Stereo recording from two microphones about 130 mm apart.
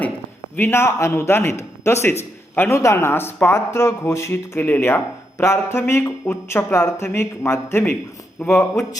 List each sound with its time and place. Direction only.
0.5 s a man's voice: 15° left (ahead or behind)